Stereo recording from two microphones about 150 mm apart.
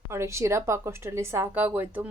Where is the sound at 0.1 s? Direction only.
20° right (ahead or behind).